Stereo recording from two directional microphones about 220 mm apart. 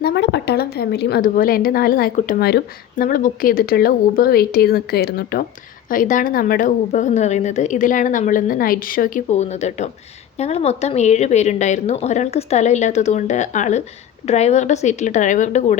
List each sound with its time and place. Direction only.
0.0 s a woman's voice: 50° left (ahead or behind); by 15.8 s 35° left (ahead or behind)